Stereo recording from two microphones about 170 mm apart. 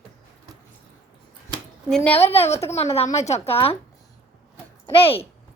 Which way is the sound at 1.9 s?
5° left (ahead or behind).